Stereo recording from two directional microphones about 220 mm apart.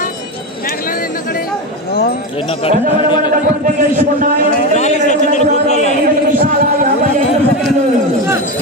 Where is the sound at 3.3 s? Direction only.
40° right (ahead or behind).